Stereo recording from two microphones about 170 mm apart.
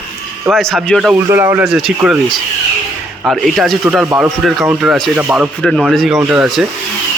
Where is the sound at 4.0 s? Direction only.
15° right (ahead or behind).